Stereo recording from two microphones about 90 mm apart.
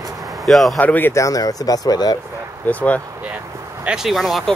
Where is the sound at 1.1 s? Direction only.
40° left (ahead or behind).